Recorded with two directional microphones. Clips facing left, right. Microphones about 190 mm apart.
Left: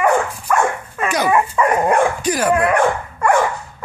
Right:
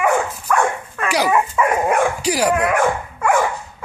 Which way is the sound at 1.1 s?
10° right (ahead or behind).